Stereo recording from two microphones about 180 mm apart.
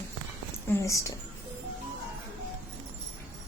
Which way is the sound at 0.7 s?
15° left (ahead or behind).